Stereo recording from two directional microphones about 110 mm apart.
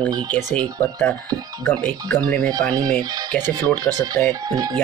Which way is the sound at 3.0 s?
35° right (ahead or behind).